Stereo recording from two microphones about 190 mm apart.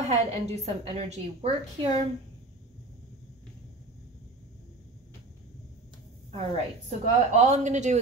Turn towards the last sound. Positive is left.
turn(degrees=-40)  # may be behind; listen again after turning